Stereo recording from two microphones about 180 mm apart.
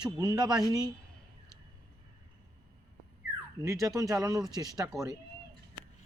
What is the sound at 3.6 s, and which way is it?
Speech, 15° right (ahead or behind).